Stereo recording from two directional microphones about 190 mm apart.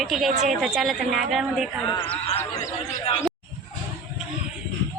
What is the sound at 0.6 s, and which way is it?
A woman's voice, centre (ahead or behind).